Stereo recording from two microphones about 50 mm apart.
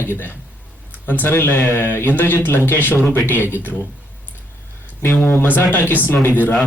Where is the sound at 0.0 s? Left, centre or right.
Left.